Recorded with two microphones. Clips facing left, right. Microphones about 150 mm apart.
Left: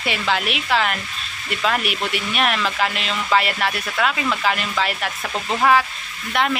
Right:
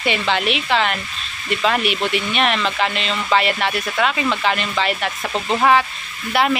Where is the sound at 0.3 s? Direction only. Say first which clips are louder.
Even; centre (ahead or behind).